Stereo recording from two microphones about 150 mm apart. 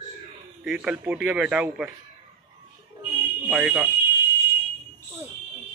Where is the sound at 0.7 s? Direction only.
10° right (ahead or behind).